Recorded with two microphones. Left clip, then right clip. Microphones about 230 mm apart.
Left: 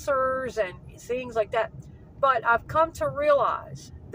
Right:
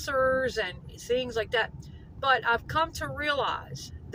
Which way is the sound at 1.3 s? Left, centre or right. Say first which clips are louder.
Left 3 dB; centre.